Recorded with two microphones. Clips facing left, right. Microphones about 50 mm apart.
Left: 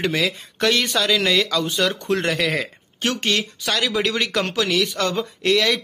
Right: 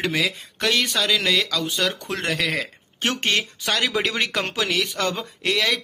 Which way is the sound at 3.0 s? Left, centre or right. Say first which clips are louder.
Left 1 dB; right.